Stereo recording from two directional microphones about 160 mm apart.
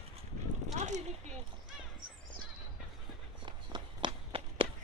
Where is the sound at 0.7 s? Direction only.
45° right (ahead or behind).